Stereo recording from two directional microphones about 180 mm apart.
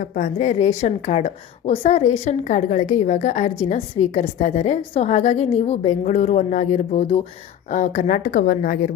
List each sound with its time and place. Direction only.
0.0 s a woman's voice: 45° left (ahead or behind)